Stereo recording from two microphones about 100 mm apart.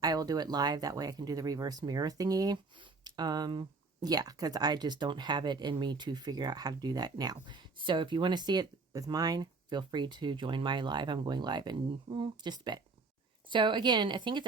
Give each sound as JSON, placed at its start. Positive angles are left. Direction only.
{"t": 0.0, "sound": "speech", "side_deg": -40}
{"t": 11.9, "sound": "speech", "side_deg": -55}